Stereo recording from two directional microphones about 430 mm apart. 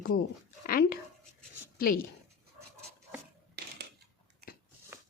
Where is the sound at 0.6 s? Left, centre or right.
Centre.